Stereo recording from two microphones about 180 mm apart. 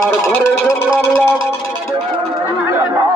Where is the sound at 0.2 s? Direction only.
20° left (ahead or behind).